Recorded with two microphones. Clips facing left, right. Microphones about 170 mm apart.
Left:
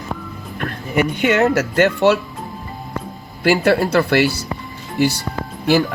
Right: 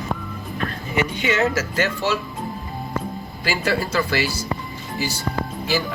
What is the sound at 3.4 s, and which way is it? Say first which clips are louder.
Speech: left 9 dB; 60° left (ahead or behind).